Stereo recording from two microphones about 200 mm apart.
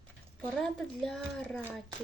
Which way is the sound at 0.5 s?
Centre (ahead or behind).